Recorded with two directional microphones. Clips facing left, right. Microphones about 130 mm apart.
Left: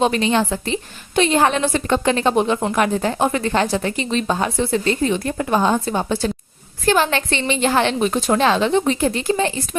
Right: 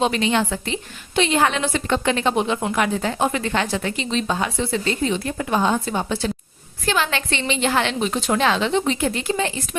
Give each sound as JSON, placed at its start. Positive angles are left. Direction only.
{"t": 0.0, "sound": "a woman's voice", "side_deg": 40}